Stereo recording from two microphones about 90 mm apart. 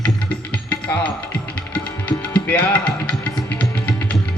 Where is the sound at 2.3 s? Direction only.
15° left (ahead or behind).